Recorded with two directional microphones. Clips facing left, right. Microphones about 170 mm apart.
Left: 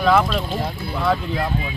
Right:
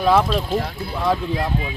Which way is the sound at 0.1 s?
25° right (ahead or behind).